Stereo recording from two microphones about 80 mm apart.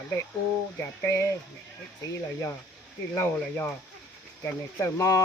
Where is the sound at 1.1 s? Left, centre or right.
Left.